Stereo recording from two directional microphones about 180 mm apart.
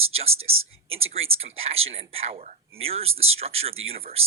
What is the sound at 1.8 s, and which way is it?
Speech, 35° right (ahead or behind).